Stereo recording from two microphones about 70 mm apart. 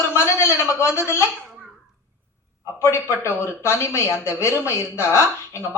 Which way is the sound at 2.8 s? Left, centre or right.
Left.